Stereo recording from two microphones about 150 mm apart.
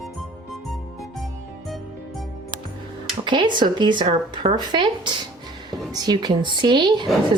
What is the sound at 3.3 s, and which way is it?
A woman's voice, 30° right (ahead or behind).